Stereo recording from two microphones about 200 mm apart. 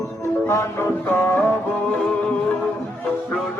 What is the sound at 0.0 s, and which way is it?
Music, 15° left (ahead or behind).